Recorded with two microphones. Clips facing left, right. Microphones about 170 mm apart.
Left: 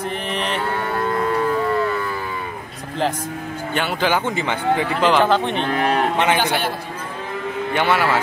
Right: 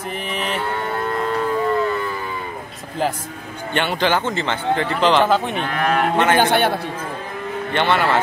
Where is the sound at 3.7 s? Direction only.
5° left (ahead or behind).